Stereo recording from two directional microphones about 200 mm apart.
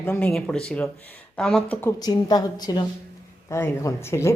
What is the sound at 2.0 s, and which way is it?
A woman's voice, 20° left (ahead or behind).